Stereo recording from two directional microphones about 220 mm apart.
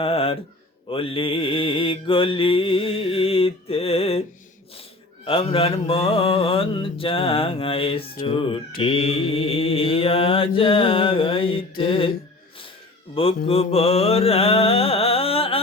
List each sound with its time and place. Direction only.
0.0 s a sound: 25° left (ahead or behind)
0.9 s mantra: 25° left (ahead or behind)
5.2 s mantra: 25° left (ahead or behind)
13.2 s mantra: 25° left (ahead or behind)